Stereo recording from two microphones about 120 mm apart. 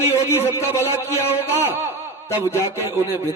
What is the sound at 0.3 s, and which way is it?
A man's voice, 20° left (ahead or behind).